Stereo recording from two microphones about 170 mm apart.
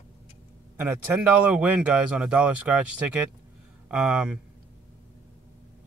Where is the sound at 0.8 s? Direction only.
10° right (ahead or behind).